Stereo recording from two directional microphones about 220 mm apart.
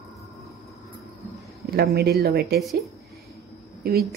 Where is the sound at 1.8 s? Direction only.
45° right (ahead or behind).